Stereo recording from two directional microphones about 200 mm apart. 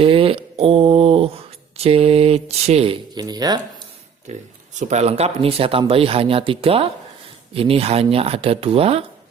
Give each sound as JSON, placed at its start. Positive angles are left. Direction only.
{"t": 0.0, "sound": "a sound", "side_deg": -25}
{"t": 1.7, "sound": "speech", "side_deg": -30}
{"t": 4.3, "sound": "speech", "side_deg": -35}